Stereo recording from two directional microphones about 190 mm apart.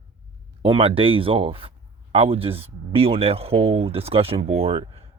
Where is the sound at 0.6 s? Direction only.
30° right (ahead or behind).